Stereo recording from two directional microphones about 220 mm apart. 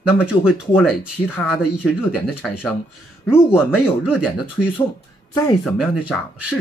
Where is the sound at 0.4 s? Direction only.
5° left (ahead or behind).